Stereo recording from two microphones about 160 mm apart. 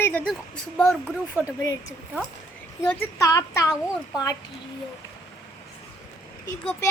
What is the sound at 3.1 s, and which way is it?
Speech, 20° left (ahead or behind).